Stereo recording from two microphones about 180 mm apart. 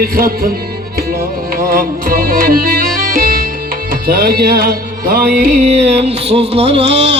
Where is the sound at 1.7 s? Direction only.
55° right (ahead or behind).